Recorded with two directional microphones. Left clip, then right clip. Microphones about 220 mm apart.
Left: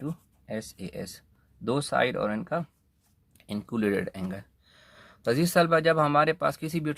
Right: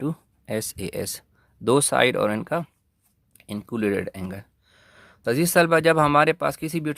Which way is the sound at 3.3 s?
25° right (ahead or behind).